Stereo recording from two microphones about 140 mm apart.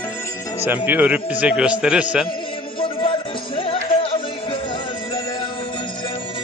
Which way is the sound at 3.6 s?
40° left (ahead or behind).